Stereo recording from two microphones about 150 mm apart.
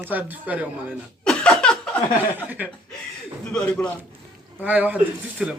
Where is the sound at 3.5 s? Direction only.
5° left (ahead or behind).